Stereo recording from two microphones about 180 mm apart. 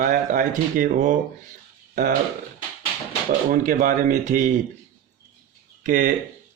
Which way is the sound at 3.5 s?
45° right (ahead or behind).